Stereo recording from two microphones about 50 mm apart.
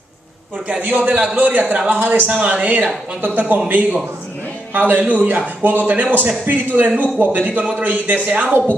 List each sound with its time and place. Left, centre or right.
0.7 s a man's voice: right
2.3 s a man's voice: right